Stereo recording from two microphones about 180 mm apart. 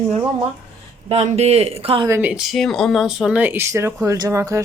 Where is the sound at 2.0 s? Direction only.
10° right (ahead or behind).